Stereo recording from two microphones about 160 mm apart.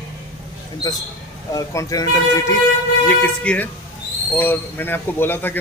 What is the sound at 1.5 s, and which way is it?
Speech, 20° left (ahead or behind).